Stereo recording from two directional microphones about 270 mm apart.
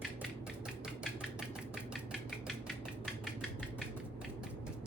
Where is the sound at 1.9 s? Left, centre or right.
Centre.